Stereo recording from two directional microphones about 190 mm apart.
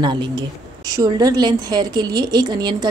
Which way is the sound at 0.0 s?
25° right (ahead or behind).